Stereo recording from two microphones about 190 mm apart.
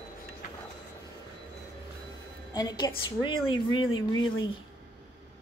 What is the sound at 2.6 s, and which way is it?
A woman's voice, 20° left (ahead or behind).